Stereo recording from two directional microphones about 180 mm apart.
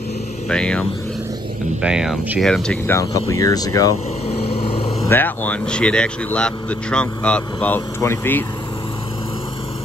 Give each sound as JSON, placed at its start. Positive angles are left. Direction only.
{"t": 0.5, "sound": "speech", "side_deg": 5}
{"t": 2.9, "sound": "speech", "side_deg": 15}
{"t": 4.3, "sound": "vehicle", "side_deg": 35}
{"t": 5.0, "sound": "speech", "side_deg": 10}